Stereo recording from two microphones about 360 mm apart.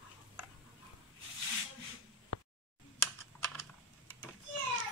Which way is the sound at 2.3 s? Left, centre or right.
Left.